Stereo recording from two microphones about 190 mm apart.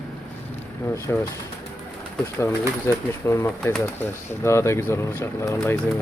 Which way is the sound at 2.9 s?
15° left (ahead or behind).